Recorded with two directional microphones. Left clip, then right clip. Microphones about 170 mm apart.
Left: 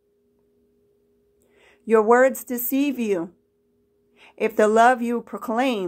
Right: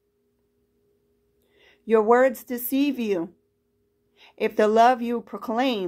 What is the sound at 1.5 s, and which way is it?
A woman's voice, 5° right (ahead or behind).